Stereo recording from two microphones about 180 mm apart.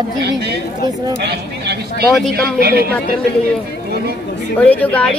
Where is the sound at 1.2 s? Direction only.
65° right (ahead or behind).